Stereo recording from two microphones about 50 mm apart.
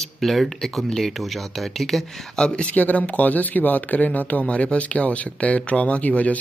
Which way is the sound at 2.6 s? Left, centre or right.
Left.